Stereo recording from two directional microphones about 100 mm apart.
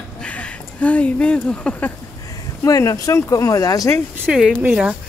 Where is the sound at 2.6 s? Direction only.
35° left (ahead or behind).